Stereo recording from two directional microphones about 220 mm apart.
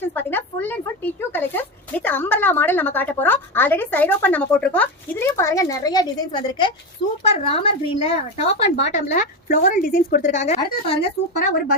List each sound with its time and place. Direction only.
0.0 s a woman's voice: 10° left (ahead or behind); by 10.9 s 30° left (ahead or behind)